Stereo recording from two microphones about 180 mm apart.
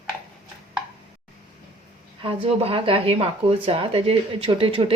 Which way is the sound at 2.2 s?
30° right (ahead or behind).